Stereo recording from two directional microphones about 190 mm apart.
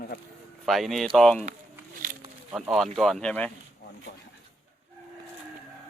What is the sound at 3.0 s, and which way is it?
Speech, 5° left (ahead or behind).